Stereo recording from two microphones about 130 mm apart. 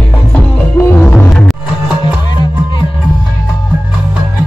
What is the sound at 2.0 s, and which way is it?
Music, 35° left (ahead or behind).